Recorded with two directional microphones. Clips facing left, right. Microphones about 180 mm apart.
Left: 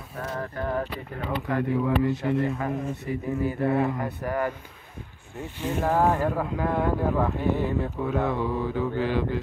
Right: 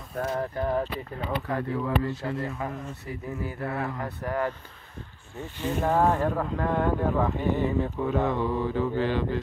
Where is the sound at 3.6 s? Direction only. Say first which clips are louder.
Left 7 dB; 20° left (ahead or behind).